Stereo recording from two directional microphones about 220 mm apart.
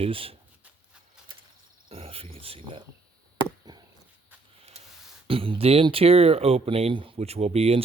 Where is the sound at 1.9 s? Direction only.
25° right (ahead or behind).